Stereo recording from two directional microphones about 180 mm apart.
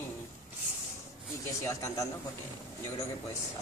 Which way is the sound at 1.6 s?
15° left (ahead or behind).